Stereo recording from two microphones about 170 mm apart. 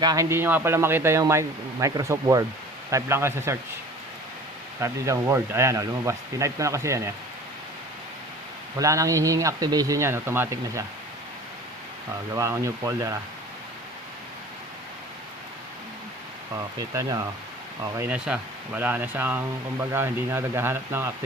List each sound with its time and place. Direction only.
0.0 s speech: 20° right (ahead or behind)
4.8 s speech: 20° right (ahead or behind)
8.8 s speech: 20° right (ahead or behind)
12.3 s speech: 15° right (ahead or behind)
16.9 s speech: 20° right (ahead or behind)